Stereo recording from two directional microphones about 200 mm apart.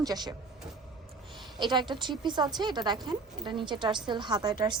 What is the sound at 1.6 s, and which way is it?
A woman's voice, 20° right (ahead or behind).